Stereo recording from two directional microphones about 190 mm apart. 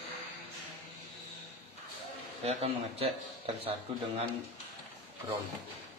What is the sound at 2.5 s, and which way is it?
A man's voice, 35° right (ahead or behind).